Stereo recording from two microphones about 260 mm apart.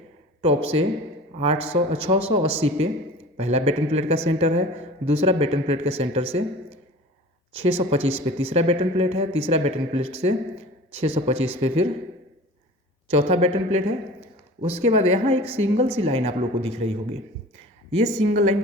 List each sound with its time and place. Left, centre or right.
0.4 s speech: right
13.1 s speech: right
14.6 s speech: right
17.9 s speech: right